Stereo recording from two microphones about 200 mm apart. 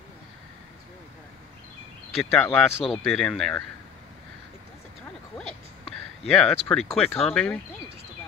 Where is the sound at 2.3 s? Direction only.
5° left (ahead or behind).